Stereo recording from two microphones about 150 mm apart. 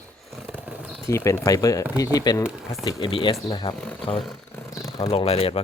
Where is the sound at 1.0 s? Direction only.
20° left (ahead or behind).